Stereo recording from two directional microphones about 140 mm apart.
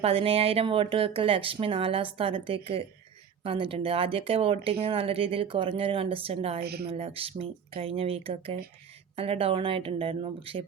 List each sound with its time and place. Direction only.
0.0 s speech: 45° right (ahead or behind)